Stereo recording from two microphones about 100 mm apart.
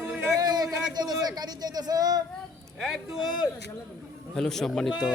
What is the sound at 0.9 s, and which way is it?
Speech, 40° right (ahead or behind).